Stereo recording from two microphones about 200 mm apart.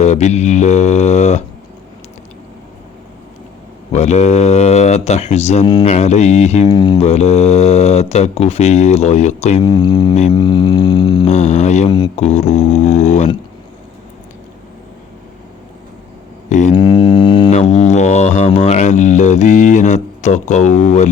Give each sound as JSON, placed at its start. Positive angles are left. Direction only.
{"t": 0.0, "sound": "speech", "side_deg": 35}
{"t": 3.9, "sound": "speech", "side_deg": 35}
{"t": 6.7, "sound": "didgeridoo", "side_deg": 20}
{"t": 7.1, "sound": "speech", "side_deg": 30}
{"t": 10.3, "sound": "didgeridoo", "side_deg": 20}
{"t": 11.3, "sound": "speech", "side_deg": 35}
{"t": 11.9, "sound": "didgeridoo", "side_deg": 20}
{"t": 12.1, "sound": "speech", "side_deg": 35}
{"t": 16.5, "sound": "a sound", "side_deg": 35}
{"t": 16.7, "sound": "didgeridoo", "side_deg": 25}
{"t": 17.5, "sound": "speech", "side_deg": 35}